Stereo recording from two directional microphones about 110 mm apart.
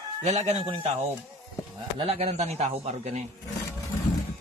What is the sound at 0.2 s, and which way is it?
Speech, 80° right.